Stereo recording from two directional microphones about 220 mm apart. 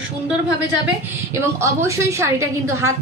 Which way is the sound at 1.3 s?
10° right (ahead or behind).